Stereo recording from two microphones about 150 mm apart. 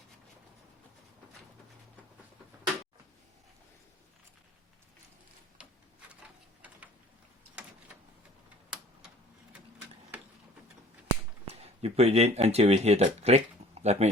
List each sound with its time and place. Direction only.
11.4 s speech: 40° right (ahead or behind)